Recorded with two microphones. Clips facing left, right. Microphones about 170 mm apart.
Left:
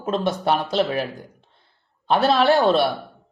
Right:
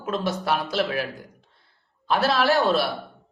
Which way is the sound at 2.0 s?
25° left (ahead or behind).